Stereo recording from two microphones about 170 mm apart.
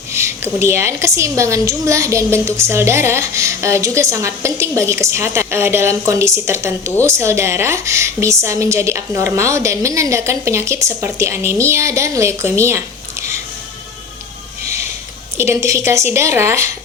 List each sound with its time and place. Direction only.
0.1 s a woman's voice: 15° right (ahead or behind)
15.4 s a woman's voice: 15° right (ahead or behind)